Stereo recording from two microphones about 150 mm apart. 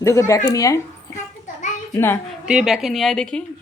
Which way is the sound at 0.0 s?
20° left (ahead or behind).